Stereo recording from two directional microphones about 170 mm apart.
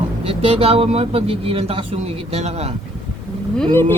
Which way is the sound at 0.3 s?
35° right (ahead or behind).